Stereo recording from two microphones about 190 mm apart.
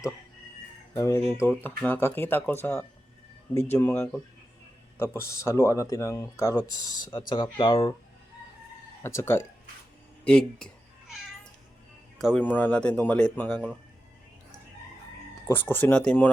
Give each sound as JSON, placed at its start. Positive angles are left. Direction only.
{"t": 0.9, "sound": "speech", "side_deg": 15}
{"t": 9.0, "sound": "speech", "side_deg": 15}
{"t": 12.2, "sound": "speech", "side_deg": 5}
{"t": 15.4, "sound": "speech", "side_deg": 10}